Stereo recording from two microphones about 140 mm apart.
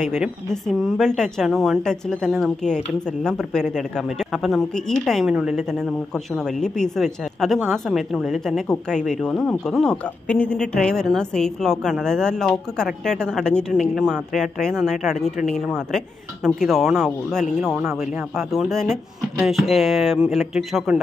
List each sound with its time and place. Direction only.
0.2 s speech: centre (ahead or behind)